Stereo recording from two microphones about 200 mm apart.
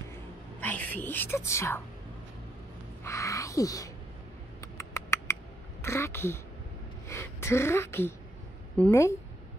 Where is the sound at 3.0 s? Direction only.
15° left (ahead or behind).